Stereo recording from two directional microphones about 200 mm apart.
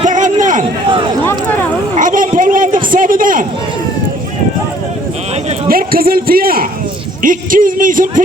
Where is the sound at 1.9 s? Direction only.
40° right (ahead or behind).